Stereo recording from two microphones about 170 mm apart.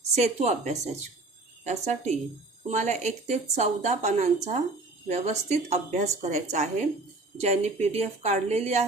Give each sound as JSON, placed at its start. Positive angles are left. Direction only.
{"t": 0.1, "sound": "a woman's voice", "side_deg": -40}